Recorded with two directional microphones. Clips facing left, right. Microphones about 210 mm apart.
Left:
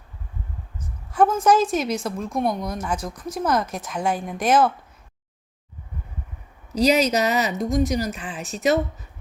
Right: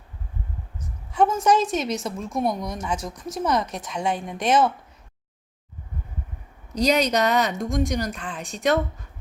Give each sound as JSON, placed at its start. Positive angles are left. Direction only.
{"t": 0.8, "sound": "a woman's voice", "side_deg": 0}
{"t": 6.7, "sound": "a woman's voice", "side_deg": 5}